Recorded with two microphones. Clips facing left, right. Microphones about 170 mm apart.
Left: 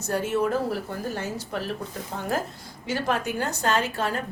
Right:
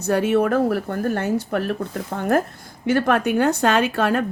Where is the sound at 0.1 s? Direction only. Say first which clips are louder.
Right 6 dB; 65° right (ahead or behind).